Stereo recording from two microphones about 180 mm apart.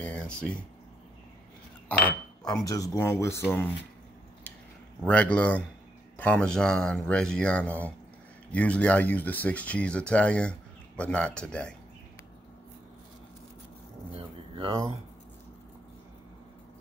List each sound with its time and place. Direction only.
0.1 s speech: 5° left (ahead or behind)
2.4 s speech: 20° left (ahead or behind)
5.0 s speech: 10° left (ahead or behind)
14.1 s a sound: 30° right (ahead or behind)